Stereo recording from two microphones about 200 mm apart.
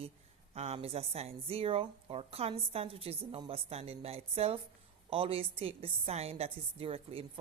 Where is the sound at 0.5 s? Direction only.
30° right (ahead or behind).